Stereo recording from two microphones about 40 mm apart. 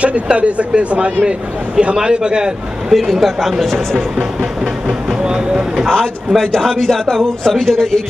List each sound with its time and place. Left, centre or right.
0.0 s speech: right
2.9 s a man's voice: centre
4.8 s vehicle: right
6.3 s a man's voice: centre